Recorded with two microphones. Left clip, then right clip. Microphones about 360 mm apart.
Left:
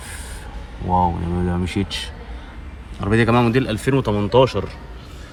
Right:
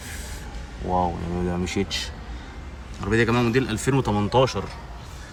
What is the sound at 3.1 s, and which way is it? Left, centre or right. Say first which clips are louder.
Speech: left 4 dB; centre.